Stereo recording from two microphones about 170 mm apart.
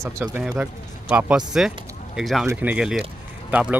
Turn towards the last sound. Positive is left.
turn(degrees=-10)  # may be behind; listen again after turning